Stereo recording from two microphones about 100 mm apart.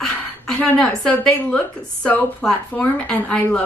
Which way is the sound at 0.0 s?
5° left (ahead or behind).